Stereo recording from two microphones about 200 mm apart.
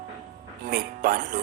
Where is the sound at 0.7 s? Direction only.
50° right (ahead or behind).